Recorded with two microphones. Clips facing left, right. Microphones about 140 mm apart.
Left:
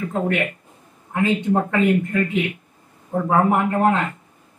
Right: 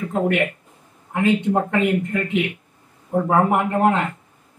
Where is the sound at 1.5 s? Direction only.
15° right (ahead or behind).